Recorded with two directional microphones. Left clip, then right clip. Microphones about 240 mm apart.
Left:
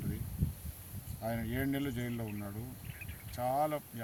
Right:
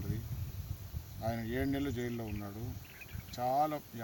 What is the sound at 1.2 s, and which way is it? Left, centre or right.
Speech, centre.